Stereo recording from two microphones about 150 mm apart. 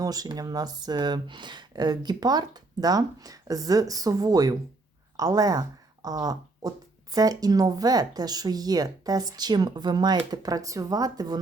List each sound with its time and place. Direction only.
0.0 s speech: 25° right (ahead or behind)